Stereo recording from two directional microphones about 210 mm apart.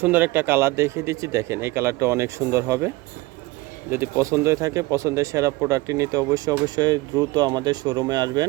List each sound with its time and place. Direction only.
0.0 s speech: 10° right (ahead or behind)